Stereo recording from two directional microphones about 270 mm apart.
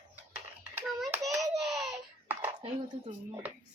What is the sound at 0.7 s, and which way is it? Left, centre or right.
Hands, centre.